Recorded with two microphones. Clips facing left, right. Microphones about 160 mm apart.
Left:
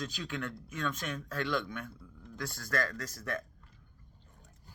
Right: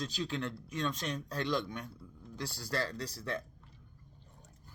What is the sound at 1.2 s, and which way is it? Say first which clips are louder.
Speech: left 1 dB; 35° right (ahead or behind).